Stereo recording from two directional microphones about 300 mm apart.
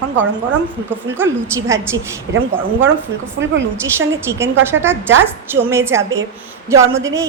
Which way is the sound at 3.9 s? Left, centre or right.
Centre.